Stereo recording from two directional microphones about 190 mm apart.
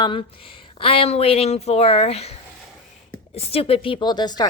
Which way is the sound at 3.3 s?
30° left (ahead or behind).